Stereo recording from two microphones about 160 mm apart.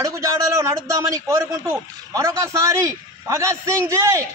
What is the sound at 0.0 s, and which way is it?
A man's voice, 20° right (ahead or behind).